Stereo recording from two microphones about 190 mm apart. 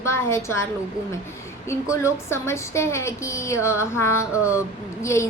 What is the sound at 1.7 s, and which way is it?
A woman's voice, 15° left (ahead or behind).